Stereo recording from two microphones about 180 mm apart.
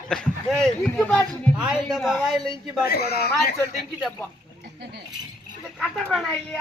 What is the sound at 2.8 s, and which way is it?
Speech, 60° left (ahead or behind).